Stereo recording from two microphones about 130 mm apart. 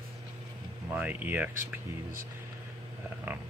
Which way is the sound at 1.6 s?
90° right.